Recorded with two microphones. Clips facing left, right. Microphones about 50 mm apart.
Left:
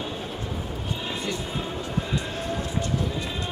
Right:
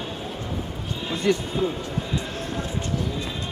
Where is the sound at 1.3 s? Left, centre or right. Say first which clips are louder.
Right 12 dB; right.